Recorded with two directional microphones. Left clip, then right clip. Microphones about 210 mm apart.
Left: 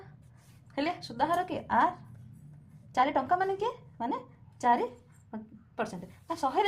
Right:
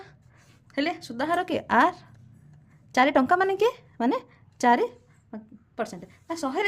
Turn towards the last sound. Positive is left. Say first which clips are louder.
# right 1 dB
turn(degrees=-25)  # may be behind; listen again after turning